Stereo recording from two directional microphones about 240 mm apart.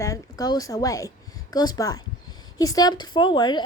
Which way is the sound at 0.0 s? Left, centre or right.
Centre.